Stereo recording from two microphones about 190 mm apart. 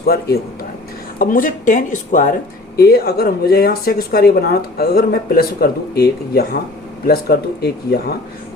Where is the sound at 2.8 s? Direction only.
55° left (ahead or behind).